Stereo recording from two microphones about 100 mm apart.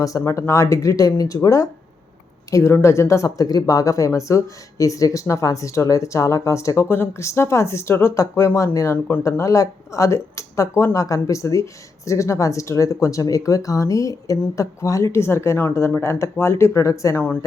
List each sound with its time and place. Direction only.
0.0 s speech: 30° left (ahead or behind)